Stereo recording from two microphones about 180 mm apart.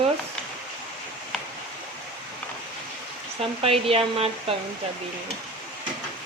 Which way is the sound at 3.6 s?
30° right (ahead or behind).